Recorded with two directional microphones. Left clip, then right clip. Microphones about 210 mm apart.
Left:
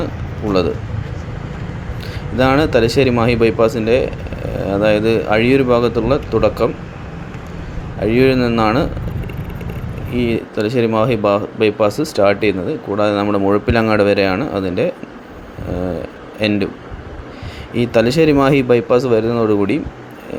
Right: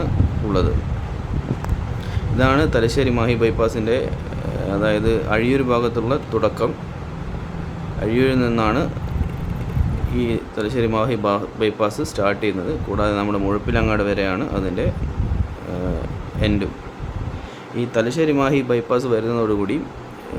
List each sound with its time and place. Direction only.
2.4 s speech: 15° left (ahead or behind)
8.0 s speech: 15° left (ahead or behind)
10.2 s speech: 15° left (ahead or behind)
16.4 s speech: 15° left (ahead or behind)
17.7 s speech: 20° left (ahead or behind)